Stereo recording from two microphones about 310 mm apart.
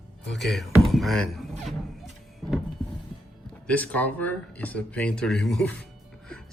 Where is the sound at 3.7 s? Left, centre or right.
Centre.